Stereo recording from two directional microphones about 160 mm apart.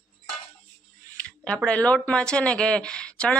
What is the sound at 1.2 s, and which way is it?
Speech, 5° left (ahead or behind).